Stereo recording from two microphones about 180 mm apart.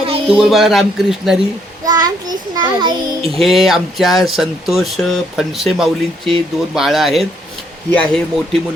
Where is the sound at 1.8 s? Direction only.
20° right (ahead or behind).